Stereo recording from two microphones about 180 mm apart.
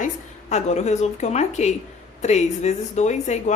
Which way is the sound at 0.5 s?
40° left (ahead or behind).